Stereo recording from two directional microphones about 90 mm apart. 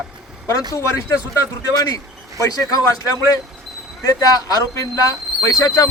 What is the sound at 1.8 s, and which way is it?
A man's voice, 40° left (ahead or behind).